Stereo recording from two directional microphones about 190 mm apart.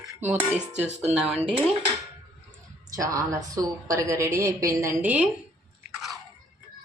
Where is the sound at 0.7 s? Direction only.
35° right (ahead or behind).